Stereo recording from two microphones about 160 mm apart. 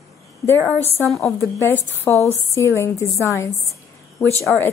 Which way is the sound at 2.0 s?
20° left (ahead or behind).